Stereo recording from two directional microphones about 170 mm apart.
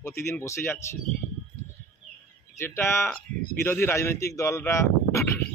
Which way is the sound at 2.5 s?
15° left (ahead or behind).